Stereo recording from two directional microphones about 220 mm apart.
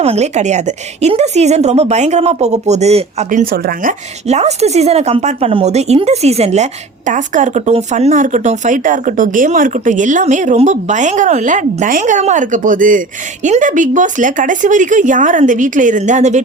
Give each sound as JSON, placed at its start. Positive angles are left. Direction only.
{"t": 0.0, "sound": "a woman's voice", "side_deg": -30}